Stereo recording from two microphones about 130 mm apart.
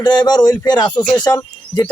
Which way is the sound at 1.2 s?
30° left (ahead or behind).